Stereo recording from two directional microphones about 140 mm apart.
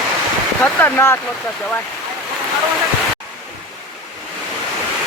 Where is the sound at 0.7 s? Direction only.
15° left (ahead or behind).